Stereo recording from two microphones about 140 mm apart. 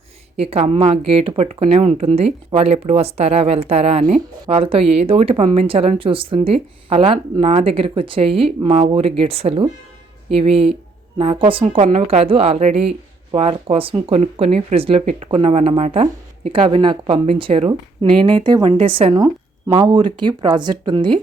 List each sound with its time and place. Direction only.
0.3 s speech: 45° right (ahead or behind)
19.1 s a sound: 25° right (ahead or behind)
19.7 s speech: 35° right (ahead or behind)